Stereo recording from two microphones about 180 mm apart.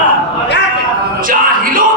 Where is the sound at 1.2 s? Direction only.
50° right (ahead or behind).